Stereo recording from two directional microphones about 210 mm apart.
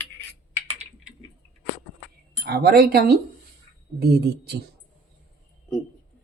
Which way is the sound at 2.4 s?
45° right (ahead or behind).